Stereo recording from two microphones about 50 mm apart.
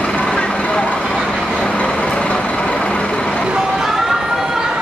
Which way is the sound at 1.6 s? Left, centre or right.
Left.